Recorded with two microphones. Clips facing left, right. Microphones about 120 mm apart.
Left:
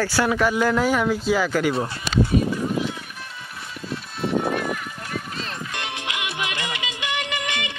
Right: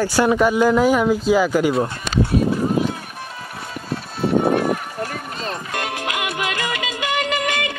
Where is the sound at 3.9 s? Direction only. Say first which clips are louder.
Right 5 dB; 50° right (ahead or behind).